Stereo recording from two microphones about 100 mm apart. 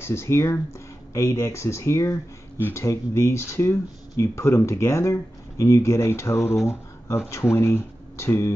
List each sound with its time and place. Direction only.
0.0 s speech: 25° left (ahead or behind)